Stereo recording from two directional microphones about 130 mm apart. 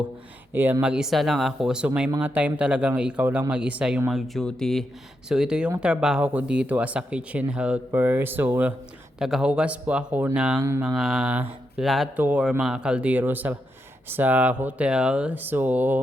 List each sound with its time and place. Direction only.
0.5 s speech: 15° right (ahead or behind)
4.1 s speech: 5° left (ahead or behind); by 8.7 s 15° right (ahead or behind)
9.1 s speech: 5° right (ahead or behind)
10.6 s a sound: 20° right (ahead or behind)
10.9 s speech: 5° right (ahead or behind)
12.1 s speech: 10° right (ahead or behind)